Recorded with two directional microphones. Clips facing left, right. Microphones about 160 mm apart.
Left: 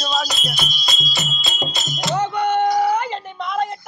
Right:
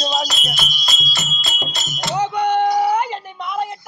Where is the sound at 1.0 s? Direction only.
Centre (ahead or behind).